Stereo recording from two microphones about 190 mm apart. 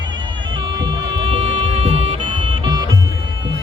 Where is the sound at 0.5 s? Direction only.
25° right (ahead or behind).